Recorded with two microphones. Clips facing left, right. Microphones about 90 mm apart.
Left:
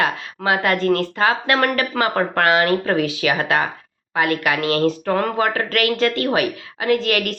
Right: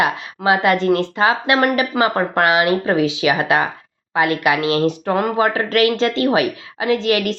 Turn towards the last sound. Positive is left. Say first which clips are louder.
# right 2 dB
turn(degrees=-20)  # may be behind; listen again after turning